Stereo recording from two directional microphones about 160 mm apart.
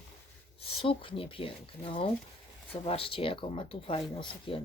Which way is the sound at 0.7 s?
35° left (ahead or behind).